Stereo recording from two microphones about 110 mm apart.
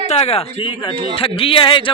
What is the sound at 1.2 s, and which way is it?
Speech, 55° left (ahead or behind).